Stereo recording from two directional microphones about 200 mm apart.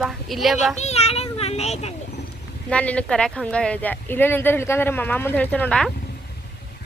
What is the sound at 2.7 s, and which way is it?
Speech, 5° left (ahead or behind).